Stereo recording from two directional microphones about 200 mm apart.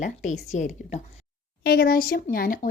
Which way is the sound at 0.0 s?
35° left (ahead or behind).